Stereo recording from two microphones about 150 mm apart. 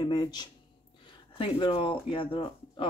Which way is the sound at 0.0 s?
25° left (ahead or behind).